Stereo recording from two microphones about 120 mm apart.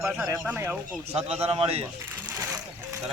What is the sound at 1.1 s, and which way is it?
Speech, 55° right (ahead or behind).